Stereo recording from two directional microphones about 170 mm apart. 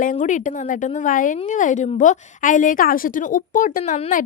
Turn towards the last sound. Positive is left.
turn(degrees=50)  # may be behind; listen again after turning